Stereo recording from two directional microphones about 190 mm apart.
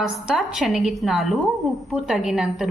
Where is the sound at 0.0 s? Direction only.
Centre (ahead or behind).